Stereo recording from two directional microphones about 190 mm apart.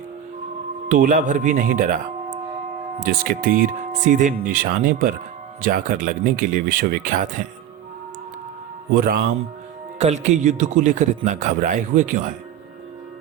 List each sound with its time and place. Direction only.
0.9 s speech: 45° right (ahead or behind)
3.0 s speech: 50° right (ahead or behind)
8.9 s speech: 50° right (ahead or behind)
10.0 s a man's voice: 35° right (ahead or behind)